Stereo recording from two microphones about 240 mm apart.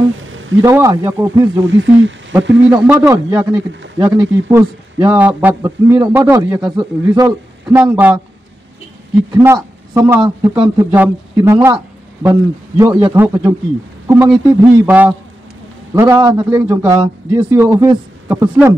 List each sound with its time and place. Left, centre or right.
0.2 s a sound: right
0.6 s speech: centre
1.6 s speech: right
2.7 s speech: centre
7.8 s speech: centre
9.3 s speech: centre